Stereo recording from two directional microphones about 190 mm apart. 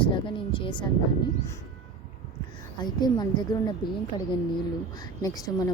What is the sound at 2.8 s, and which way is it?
Speech, 20° left (ahead or behind).